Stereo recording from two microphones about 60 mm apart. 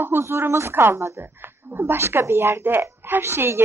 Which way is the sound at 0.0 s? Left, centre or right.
Right.